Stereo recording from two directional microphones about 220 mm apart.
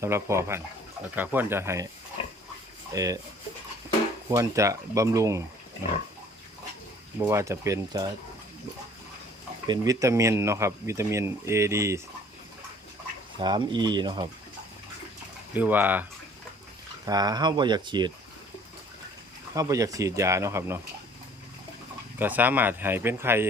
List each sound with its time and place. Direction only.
0.0 s speech: 10° right (ahead or behind)
2.2 s pig: 25° left (ahead or behind)
2.9 s speech: 15° right (ahead or behind)
4.3 s speech: 15° right (ahead or behind)
7.2 s speech: 15° right (ahead or behind)
9.6 s speech: 15° right (ahead or behind)
13.4 s speech: 20° right (ahead or behind)
15.5 s speech: 10° right (ahead or behind)
17.1 s speech: 20° right (ahead or behind)
19.5 s speech: 15° right (ahead or behind)
22.2 s speech: 10° right (ahead or behind)